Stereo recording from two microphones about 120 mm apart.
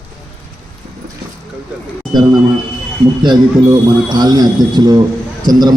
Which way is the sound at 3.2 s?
35° right (ahead or behind).